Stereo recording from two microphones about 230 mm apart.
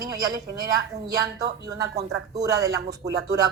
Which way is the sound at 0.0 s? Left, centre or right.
Centre.